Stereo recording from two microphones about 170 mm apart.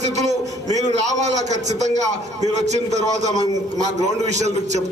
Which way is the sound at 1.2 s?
45° right (ahead or behind).